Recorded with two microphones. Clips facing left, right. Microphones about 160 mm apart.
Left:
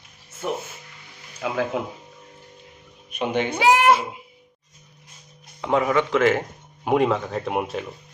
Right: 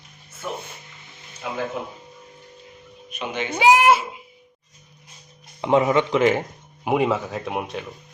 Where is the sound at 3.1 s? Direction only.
55° left (ahead or behind).